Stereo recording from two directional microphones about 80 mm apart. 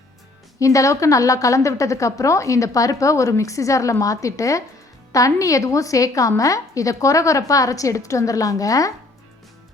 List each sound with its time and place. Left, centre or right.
0.6 s a woman's voice: left